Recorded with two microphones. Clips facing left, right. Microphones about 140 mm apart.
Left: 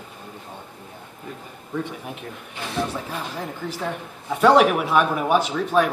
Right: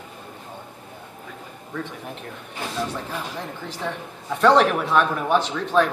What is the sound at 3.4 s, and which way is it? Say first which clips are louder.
Speech: left 2 dB; 10° left (ahead or behind).